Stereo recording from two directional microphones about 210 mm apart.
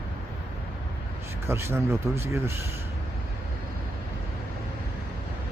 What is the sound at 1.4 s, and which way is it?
Speech, 10° right (ahead or behind).